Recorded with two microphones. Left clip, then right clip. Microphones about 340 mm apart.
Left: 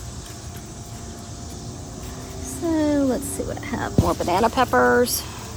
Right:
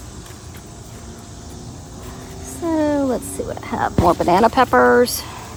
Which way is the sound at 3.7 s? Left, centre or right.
Centre.